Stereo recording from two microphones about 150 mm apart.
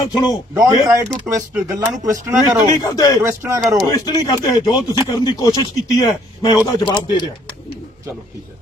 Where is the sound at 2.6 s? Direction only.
25° left (ahead or behind).